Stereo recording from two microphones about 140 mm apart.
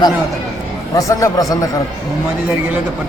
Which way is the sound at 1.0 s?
25° left (ahead or behind).